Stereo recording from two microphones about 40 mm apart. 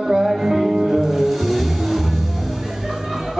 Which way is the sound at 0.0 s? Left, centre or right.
Centre.